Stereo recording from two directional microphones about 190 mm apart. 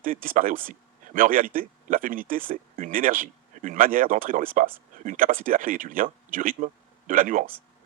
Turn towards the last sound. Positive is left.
turn(degrees=-45)  # may be behind; listen again after turning